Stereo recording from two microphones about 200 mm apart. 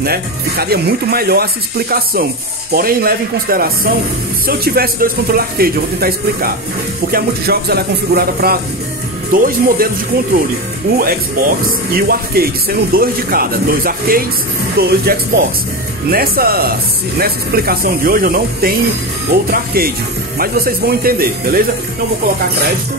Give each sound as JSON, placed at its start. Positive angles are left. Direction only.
{"t": 0.0, "sound": "speech", "side_deg": -50}
{"t": 10.9, "sound": "speech", "side_deg": -50}